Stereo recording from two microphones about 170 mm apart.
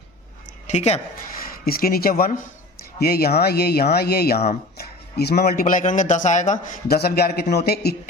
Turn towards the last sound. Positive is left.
turn(degrees=65)  # may be behind; listen again after turning